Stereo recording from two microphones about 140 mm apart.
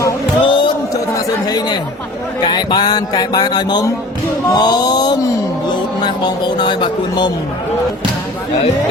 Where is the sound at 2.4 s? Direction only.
30° left (ahead or behind).